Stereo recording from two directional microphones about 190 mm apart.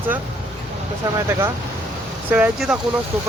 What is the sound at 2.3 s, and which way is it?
Speech, 5° right (ahead or behind).